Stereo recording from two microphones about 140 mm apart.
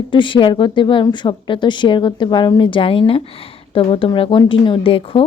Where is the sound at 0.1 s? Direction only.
35° left (ahead or behind).